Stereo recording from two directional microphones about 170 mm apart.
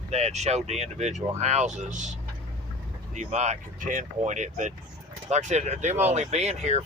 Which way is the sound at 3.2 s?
40° right (ahead or behind).